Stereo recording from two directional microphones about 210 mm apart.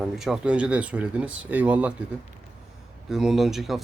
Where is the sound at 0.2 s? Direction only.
5° right (ahead or behind).